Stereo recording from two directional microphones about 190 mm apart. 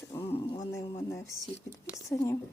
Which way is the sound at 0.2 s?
30° left (ahead or behind).